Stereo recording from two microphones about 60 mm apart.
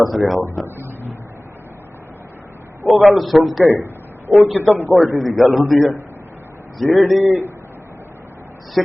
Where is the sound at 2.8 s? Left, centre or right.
Centre.